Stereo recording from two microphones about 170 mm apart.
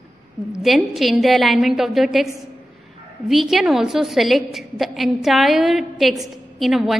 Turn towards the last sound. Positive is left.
turn(degrees=0)  # may be behind; listen again after turning